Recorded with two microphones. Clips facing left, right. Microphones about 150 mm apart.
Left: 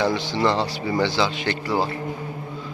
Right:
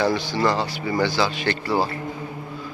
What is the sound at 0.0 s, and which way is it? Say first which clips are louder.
A man's voice: even; 20° left (ahead or behind).